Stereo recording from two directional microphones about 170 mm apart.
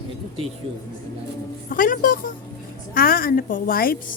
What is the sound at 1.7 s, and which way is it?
A woman's voice, 55° left (ahead or behind).